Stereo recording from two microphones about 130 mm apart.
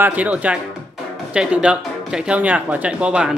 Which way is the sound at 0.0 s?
10° right (ahead or behind).